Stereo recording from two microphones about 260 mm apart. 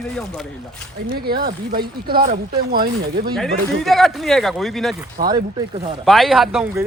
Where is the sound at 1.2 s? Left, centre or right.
Right.